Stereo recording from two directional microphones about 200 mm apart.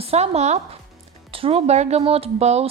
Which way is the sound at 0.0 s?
30° right (ahead or behind).